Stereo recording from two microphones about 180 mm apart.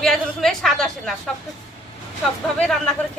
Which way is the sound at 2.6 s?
5° left (ahead or behind).